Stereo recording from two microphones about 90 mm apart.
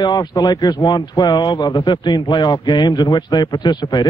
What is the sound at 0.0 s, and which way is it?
Speech, 50° left (ahead or behind).